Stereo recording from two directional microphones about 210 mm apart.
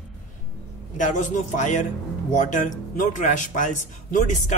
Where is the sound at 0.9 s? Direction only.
35° left (ahead or behind).